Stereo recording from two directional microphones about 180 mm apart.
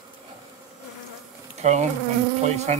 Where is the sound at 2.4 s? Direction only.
40° right (ahead or behind).